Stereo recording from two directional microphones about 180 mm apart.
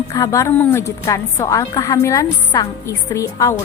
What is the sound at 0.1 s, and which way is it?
A woman's voice, 20° left (ahead or behind).